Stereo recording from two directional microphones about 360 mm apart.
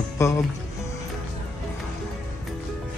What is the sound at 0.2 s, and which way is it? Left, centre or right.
Speech, centre.